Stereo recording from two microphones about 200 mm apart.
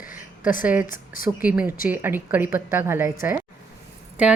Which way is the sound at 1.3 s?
5° right (ahead or behind).